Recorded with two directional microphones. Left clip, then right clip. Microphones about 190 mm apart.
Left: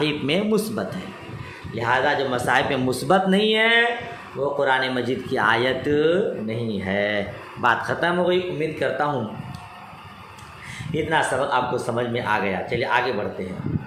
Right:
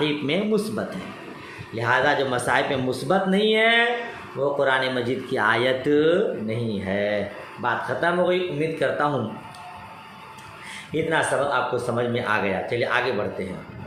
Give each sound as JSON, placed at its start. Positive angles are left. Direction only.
{"t": 0.0, "sound": "speech", "side_deg": 15}
{"t": 1.7, "sound": "a man's voice", "side_deg": 0}
{"t": 7.6, "sound": "speech", "side_deg": 25}
{"t": 8.0, "sound": "speech", "side_deg": 10}
{"t": 10.9, "sound": "speech", "side_deg": 10}